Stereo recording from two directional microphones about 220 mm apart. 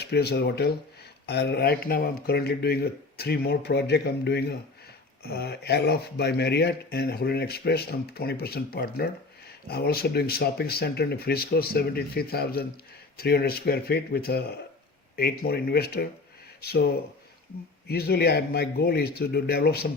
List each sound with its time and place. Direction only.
0.0 s speech: 50° left (ahead or behind)
15.4 s speech: 45° left (ahead or behind)